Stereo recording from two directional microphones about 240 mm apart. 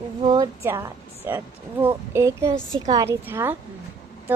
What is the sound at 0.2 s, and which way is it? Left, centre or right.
A woman's voice, centre.